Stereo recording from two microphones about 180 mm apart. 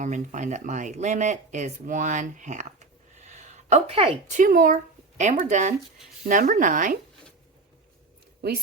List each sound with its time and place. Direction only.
0.0 s speech: 45° right (ahead or behind)
4.4 s speech: 50° right (ahead or behind)
8.4 s speech: 60° right (ahead or behind)